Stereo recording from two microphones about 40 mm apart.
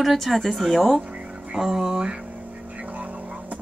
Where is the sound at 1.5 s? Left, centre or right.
Centre.